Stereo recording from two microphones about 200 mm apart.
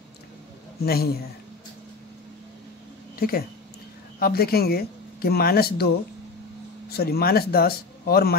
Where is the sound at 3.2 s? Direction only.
50° left (ahead or behind).